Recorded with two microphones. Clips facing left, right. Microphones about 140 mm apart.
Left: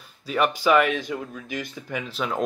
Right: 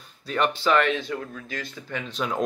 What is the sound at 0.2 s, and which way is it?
Speech, 10° left (ahead or behind).